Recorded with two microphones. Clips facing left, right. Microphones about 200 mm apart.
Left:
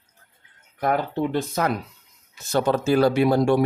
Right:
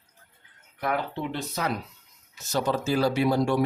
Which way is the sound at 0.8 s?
45° left (ahead or behind).